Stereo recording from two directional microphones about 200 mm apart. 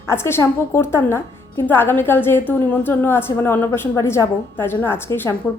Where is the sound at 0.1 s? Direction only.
10° left (ahead or behind).